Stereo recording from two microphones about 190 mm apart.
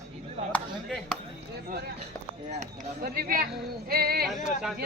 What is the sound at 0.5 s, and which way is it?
Chop, 5° left (ahead or behind).